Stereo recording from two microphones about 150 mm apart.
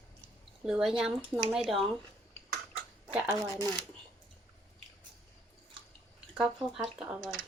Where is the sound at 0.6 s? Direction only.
5° right (ahead or behind).